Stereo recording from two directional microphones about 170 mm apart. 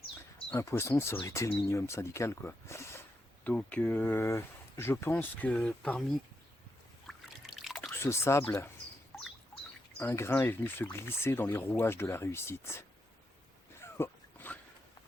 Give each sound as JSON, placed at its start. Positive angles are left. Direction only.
{"t": 0.5, "sound": "speech", "side_deg": 15}
{"t": 7.1, "sound": "trickle", "side_deg": 0}
{"t": 7.9, "sound": "speech", "side_deg": 15}
{"t": 9.1, "sound": "a sound", "side_deg": 5}
{"t": 10.0, "sound": "speech", "side_deg": 15}
{"t": 13.8, "sound": "a sound", "side_deg": 15}